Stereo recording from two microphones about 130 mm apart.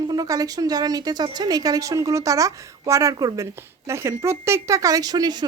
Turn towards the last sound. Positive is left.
turn(degrees=-35)  # may be behind; listen again after turning